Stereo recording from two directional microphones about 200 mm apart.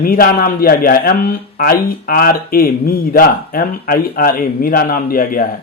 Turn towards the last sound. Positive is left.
turn(degrees=45)  # may be behind; listen again after turning